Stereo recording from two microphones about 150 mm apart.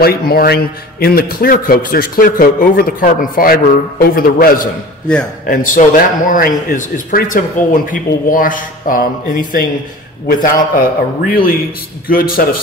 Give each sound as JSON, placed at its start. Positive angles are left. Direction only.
{"t": 0.0, "sound": "speech", "side_deg": 90}
{"t": 5.5, "sound": "a man's voice", "side_deg": 60}
{"t": 10.2, "sound": "speech", "side_deg": 65}